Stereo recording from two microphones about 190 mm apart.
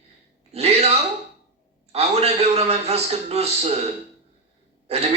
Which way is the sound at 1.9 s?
35° right (ahead or behind).